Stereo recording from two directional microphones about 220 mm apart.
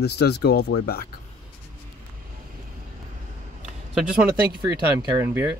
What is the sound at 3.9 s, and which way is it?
Speech, 5° right (ahead or behind).